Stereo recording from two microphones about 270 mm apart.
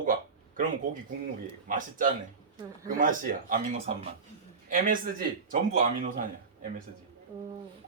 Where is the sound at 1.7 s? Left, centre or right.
Right.